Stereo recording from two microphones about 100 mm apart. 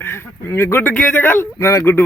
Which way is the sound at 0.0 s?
25° left (ahead or behind).